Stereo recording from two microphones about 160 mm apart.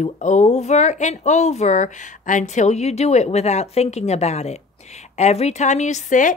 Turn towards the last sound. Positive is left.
turn(degrees=50)  # may be behind; listen again after turning